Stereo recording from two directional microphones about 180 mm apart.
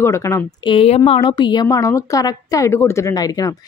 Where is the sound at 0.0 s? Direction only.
15° left (ahead or behind).